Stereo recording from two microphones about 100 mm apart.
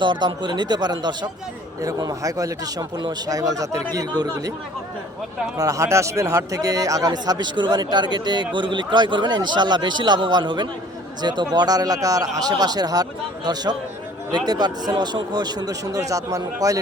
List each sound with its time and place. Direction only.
0.0 s speech: 50° right (ahead or behind)
5.5 s speech: 35° right (ahead or behind)